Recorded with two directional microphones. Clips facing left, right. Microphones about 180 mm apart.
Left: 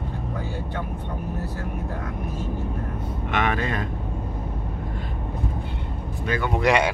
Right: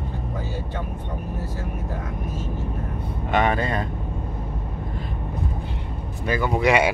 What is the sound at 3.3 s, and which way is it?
Vehicle, 35° right (ahead or behind).